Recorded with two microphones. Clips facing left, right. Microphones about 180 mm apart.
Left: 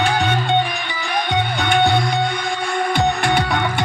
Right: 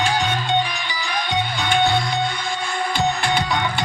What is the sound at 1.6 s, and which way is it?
Music, 55° left (ahead or behind).